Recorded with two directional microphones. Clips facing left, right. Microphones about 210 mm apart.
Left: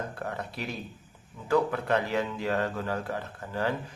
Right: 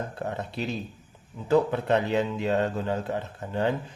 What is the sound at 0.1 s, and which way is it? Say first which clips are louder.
Speech: right 3 dB; 25° right (ahead or behind).